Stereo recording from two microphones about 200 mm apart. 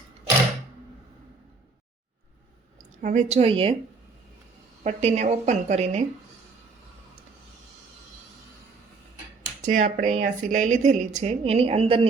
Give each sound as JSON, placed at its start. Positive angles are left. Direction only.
{"t": 3.0, "sound": "speech", "side_deg": -35}
{"t": 4.8, "sound": "speech", "side_deg": -35}
{"t": 9.6, "sound": "speech", "side_deg": -40}